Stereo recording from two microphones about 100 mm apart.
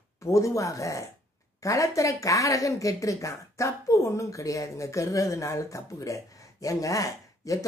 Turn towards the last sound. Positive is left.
turn(degrees=35)  # may be behind; listen again after turning